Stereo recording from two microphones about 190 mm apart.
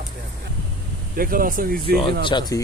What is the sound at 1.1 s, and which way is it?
Speech, 50° right (ahead or behind).